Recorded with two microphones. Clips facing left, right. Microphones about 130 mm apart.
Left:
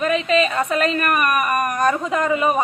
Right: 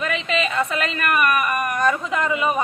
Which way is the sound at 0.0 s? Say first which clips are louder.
Left 5 dB; 40° left (ahead or behind).